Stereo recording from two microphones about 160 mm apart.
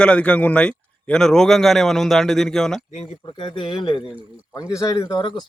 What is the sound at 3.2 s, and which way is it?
Speech, 30° left (ahead or behind).